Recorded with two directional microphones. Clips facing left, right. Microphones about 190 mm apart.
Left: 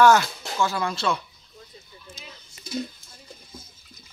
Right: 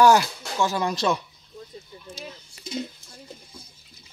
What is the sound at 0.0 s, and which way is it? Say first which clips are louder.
Speech: even; 15° right (ahead or behind).